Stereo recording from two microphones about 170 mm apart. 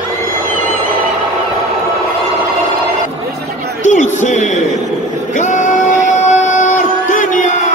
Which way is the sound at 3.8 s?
45° left (ahead or behind).